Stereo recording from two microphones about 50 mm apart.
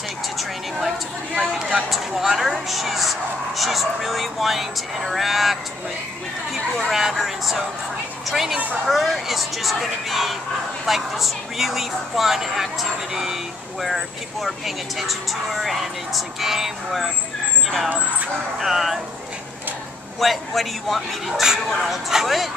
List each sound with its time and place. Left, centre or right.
0.4 s vehicle: centre
1.8 s a sound: centre
2.7 s speech: centre
6.9 s a woman's voice: centre
17.8 s speech: right
18.6 s a woman's voice: centre
20.2 s a woman's voice: centre
21.3 s speech: centre
21.6 s a woman's voice: centre